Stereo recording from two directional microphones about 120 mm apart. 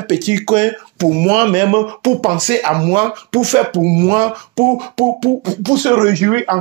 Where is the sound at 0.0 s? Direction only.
45° right (ahead or behind).